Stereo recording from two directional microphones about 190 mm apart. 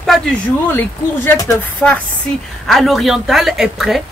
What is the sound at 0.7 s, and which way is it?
A woman's voice, 10° left (ahead or behind).